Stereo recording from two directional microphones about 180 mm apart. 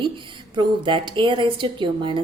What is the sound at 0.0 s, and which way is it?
A woman's voice, 25° right (ahead or behind).